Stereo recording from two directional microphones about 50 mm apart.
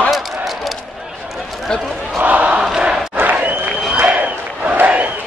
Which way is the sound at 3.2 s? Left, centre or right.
Right.